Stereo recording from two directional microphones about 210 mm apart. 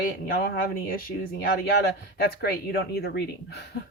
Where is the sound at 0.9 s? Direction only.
45° left (ahead or behind).